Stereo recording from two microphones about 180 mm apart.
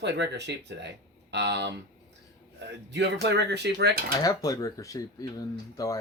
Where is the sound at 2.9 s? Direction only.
75° right (ahead or behind).